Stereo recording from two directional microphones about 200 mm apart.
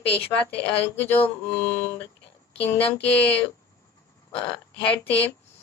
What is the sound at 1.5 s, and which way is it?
Speech, 10° left (ahead or behind).